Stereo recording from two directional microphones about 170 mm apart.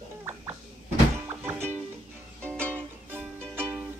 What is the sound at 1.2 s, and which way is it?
Music, 15° right (ahead or behind).